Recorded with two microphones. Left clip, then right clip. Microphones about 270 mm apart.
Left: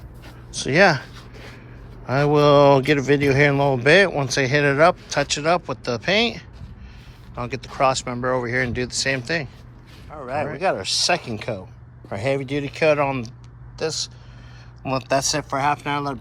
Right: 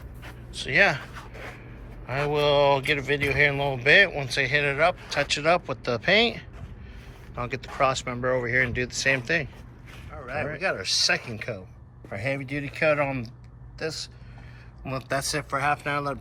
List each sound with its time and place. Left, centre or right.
0.5 s speech: centre
2.0 s speech: left